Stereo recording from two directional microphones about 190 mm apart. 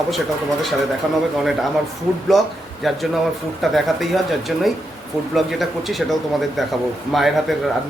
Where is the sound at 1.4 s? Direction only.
Centre (ahead or behind).